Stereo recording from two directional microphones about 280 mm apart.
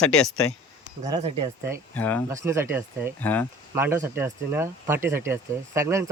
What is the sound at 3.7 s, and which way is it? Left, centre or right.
Speech, centre.